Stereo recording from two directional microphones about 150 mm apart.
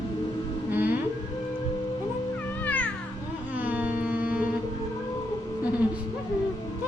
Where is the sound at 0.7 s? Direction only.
15° right (ahead or behind).